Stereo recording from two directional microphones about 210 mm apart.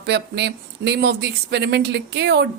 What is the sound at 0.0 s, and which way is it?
Speech, 55° right (ahead or behind).